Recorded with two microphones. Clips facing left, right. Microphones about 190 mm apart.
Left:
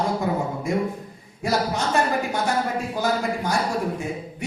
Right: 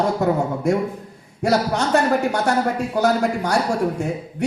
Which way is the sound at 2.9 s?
70° right (ahead or behind).